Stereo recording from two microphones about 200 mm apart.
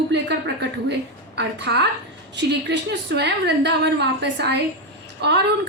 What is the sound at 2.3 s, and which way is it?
A woman's voice, 60° right (ahead or behind).